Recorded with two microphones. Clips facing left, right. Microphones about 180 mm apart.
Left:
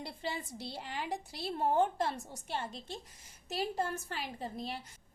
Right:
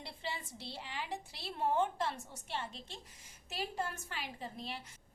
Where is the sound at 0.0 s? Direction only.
45° left (ahead or behind).